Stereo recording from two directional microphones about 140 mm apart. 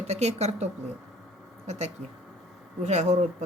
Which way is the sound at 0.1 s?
50° right (ahead or behind).